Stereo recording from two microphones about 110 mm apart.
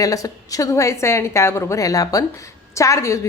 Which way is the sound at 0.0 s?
30° left (ahead or behind).